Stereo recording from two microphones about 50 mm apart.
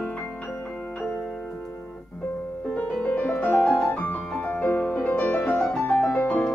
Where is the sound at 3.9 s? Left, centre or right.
Left.